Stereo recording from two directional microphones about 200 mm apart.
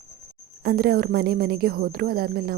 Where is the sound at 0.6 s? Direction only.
50° right (ahead or behind).